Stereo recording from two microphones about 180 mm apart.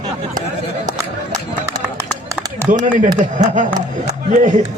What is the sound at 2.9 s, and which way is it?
A man's voice, 45° right (ahead or behind).